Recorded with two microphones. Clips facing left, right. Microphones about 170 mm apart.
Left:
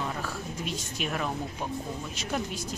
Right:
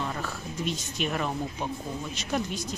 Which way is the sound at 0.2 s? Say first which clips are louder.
Right 2 dB; 5° left (ahead or behind).